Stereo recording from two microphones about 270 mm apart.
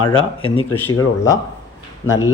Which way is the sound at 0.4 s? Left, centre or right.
Centre.